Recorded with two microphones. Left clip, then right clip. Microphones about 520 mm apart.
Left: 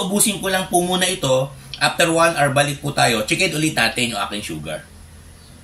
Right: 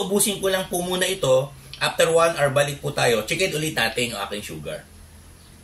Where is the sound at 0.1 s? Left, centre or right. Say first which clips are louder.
Even; right.